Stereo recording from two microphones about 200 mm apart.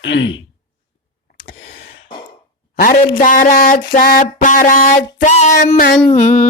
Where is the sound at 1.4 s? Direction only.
50° left (ahead or behind).